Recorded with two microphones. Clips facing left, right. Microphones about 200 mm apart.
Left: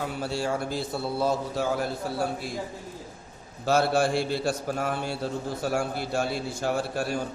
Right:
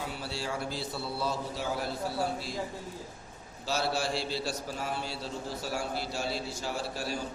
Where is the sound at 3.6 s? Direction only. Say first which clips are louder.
Left 8 dB; 55° left (ahead or behind).